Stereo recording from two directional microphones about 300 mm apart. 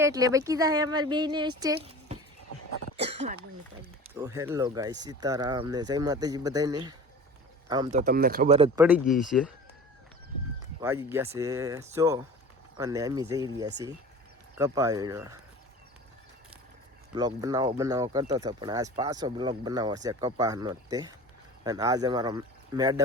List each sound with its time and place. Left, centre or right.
0.0 s speech: centre
4.1 s speech: centre
7.9 s speech: right
8.8 s speech: centre
10.8 s speech: centre
17.2 s speech: centre